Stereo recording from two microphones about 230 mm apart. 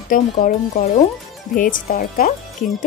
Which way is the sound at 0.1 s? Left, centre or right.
Left.